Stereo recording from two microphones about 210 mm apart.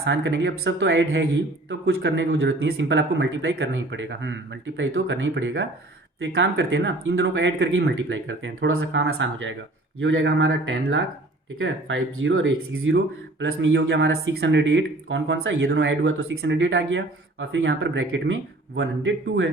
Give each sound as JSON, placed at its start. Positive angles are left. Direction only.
{"t": 0.0, "sound": "speech", "side_deg": -60}
{"t": 9.0, "sound": "speech", "side_deg": -60}